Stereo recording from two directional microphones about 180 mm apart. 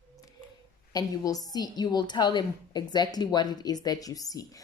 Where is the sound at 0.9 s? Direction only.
20° left (ahead or behind).